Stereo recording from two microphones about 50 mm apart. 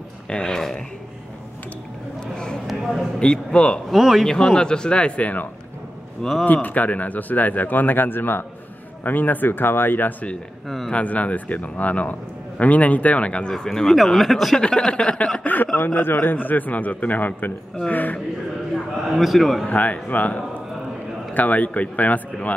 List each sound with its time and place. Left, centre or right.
0.3 s speech: centre
2.3 s a sound: centre
2.6 s a sound: centre
3.2 s speech: centre
3.9 s a man's voice: centre
4.3 s a man's voice: centre; by 10.1 s left
10.9 s a man's voice: left
13.5 s speech: centre
14.6 s speech: centre
15.4 s a man's voice: left
19.1 s a man's voice: centre
19.7 s a man's voice: left